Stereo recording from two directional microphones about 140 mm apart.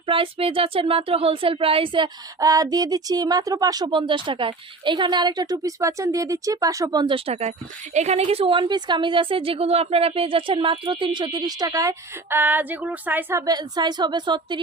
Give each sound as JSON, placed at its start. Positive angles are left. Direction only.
{"t": 0.0, "sound": "a woman's voice", "side_deg": -40}
{"t": 2.4, "sound": "speech", "side_deg": -25}
{"t": 7.3, "sound": "a woman's voice", "side_deg": -50}
{"t": 13.4, "sound": "a woman's voice", "side_deg": -30}